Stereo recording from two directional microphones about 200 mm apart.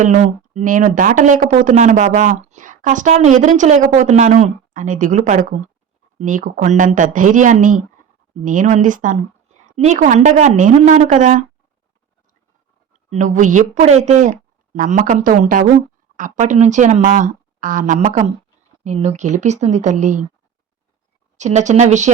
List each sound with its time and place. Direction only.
0.0 s speech: 40° right (ahead or behind)
13.1 s speech: 40° right (ahead or behind)
21.3 s speech: 35° right (ahead or behind)